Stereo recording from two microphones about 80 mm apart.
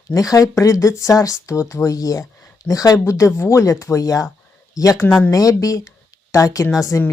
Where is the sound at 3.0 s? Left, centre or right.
Left.